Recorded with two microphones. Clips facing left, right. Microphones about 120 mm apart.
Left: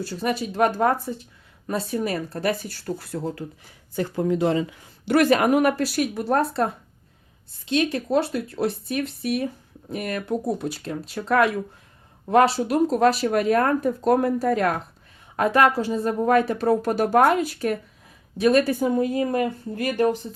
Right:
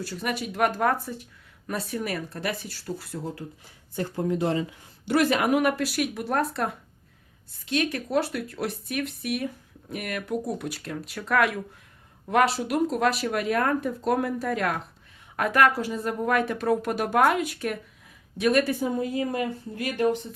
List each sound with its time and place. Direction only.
0.0 s speech: 30° left (ahead or behind); by 3.4 s 55° left (ahead or behind)
3.9 s speech: 90° left
5.0 s speech: 55° left (ahead or behind); by 18.7 s 35° left (ahead or behind)
18.8 s a woman's voice: 55° left (ahead or behind)